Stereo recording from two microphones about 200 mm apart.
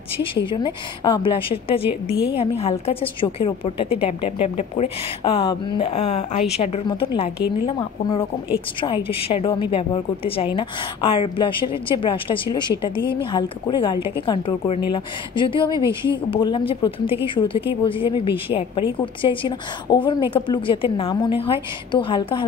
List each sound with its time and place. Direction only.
0.5 s a woman's voice: 25° left (ahead or behind)